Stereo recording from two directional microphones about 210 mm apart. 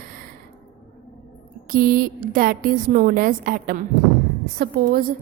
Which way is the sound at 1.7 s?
45° right (ahead or behind).